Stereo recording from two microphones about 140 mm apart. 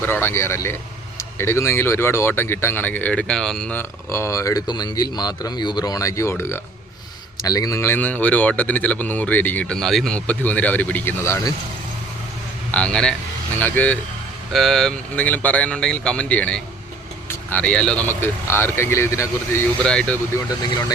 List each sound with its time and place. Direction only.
0.0 s speech: 15° left (ahead or behind)
3.8 s speech: 20° left (ahead or behind)
12.7 s speech: 5° left (ahead or behind)
14.5 s speech: centre (ahead or behind); by 19.6 s 20° left (ahead or behind)
19.8 s speech: 5° left (ahead or behind)